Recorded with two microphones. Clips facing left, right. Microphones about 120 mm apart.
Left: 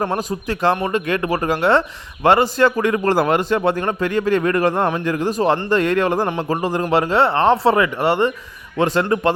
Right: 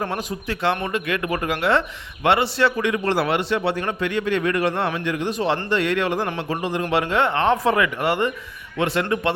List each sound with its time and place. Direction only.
0.0 s a man's voice: 40° left (ahead or behind)